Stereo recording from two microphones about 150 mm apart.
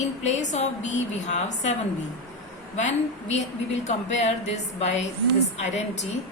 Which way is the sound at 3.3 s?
50° left (ahead or behind).